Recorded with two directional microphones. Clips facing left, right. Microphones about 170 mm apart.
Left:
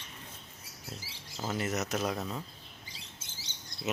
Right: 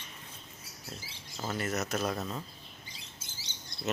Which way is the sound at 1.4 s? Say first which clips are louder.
Even; 10° left (ahead or behind).